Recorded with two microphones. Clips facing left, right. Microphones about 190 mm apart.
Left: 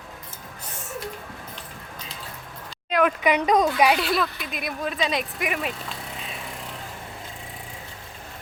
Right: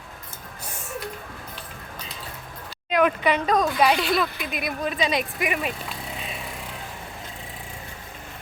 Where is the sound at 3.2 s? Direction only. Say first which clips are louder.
Left 2 dB; 15° left (ahead or behind).